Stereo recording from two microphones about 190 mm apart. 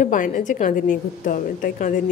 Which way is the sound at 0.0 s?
45° left (ahead or behind).